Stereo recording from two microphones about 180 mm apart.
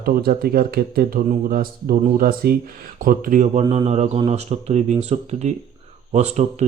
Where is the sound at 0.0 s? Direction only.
55° right (ahead or behind).